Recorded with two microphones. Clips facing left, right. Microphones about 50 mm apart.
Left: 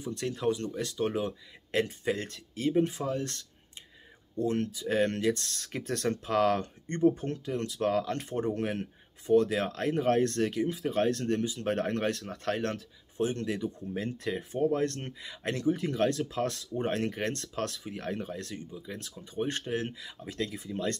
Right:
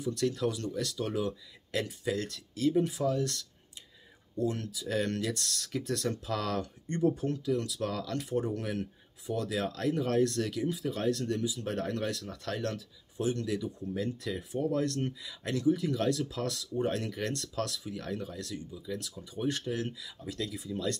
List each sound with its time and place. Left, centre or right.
0.0 s speech: left